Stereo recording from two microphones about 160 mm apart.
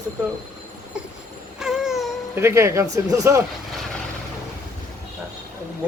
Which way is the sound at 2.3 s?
15° right (ahead or behind).